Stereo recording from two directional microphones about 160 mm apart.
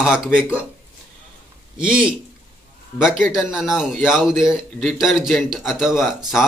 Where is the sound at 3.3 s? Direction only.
Centre (ahead or behind).